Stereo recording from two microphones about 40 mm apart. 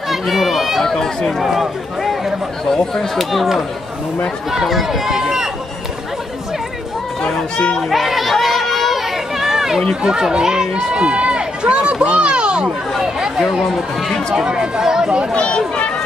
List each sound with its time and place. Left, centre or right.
0.1 s speech: centre
0.8 s speech: centre
1.4 s speech: centre
2.6 s speech: centre
3.3 s speech: centre
7.5 s speech: left
7.9 s a sound: centre
10.0 s speech: centre
14.3 s speech: right
15.3 s speech: left